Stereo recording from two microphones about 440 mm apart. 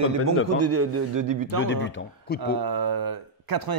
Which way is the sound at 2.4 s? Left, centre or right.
Right.